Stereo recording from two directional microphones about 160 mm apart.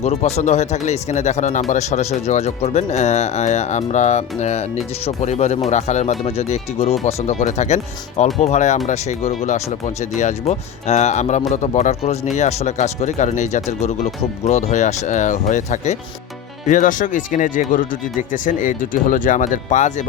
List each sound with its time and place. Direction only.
0.0 s speech: 45° left (ahead or behind)